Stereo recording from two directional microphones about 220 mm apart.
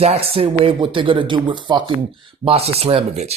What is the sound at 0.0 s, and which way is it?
Speech, 25° right (ahead or behind).